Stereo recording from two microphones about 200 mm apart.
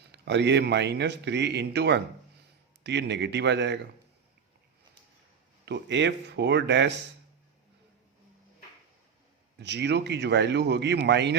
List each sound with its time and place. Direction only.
0.1 s speech: 60° right (ahead or behind)
5.6 s speech: 60° right (ahead or behind)
9.6 s speech: 60° right (ahead or behind)